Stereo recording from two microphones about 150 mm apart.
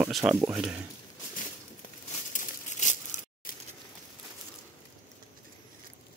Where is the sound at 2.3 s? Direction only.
55° left (ahead or behind).